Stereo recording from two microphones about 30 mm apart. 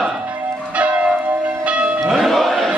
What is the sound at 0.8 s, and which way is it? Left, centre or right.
Church bell, right.